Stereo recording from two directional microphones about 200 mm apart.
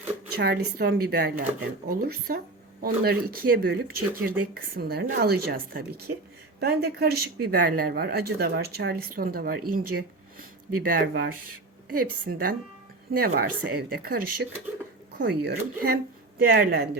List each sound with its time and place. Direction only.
0.3 s speech: 50° right (ahead or behind)